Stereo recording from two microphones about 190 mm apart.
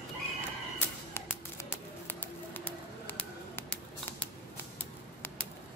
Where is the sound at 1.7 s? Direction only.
10° left (ahead or behind).